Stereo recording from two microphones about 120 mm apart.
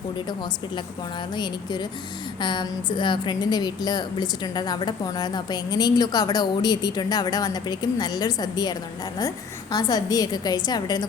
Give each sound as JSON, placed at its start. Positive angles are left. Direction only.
{"t": 2.4, "sound": "a woman's voice", "side_deg": 40}
{"t": 9.7, "sound": "a woman's voice", "side_deg": 30}